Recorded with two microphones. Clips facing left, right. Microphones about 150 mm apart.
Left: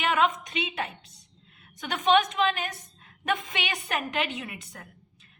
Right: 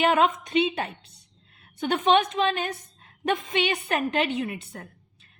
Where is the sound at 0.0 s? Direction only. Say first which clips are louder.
Right 4 dB; 30° right (ahead or behind).